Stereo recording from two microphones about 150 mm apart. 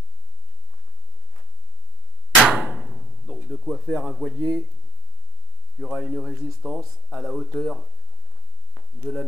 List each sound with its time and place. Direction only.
2.4 s arrow: 5° right (ahead or behind)
4.3 s speech: 10° right (ahead or behind)
5.8 s speech: 5° right (ahead or behind)
9.1 s speech: 10° right (ahead or behind)